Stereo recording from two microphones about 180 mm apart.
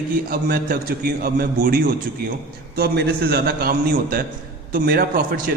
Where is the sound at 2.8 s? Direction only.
60° right (ahead or behind).